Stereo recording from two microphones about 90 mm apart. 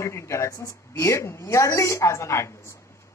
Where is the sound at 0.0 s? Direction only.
30° left (ahead or behind).